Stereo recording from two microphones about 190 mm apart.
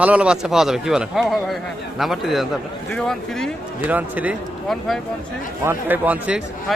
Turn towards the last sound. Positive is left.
turn(degrees=-5)  # may be behind; listen again after turning